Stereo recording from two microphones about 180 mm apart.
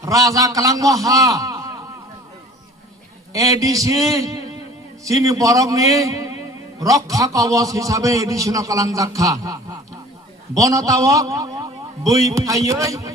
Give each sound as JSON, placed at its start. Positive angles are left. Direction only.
{"t": 0.0, "sound": "a man's voice", "side_deg": -20}
{"t": 3.3, "sound": "a man's voice", "side_deg": -20}